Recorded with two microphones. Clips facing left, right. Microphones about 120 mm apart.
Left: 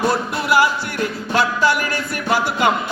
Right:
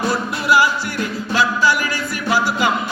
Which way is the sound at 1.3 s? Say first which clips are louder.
Even; 60° left (ahead or behind).